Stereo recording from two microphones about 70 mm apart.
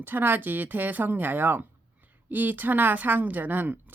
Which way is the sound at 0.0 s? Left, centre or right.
Right.